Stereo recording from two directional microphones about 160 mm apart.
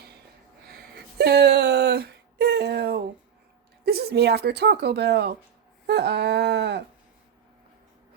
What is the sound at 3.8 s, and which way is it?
Speech, 85° right.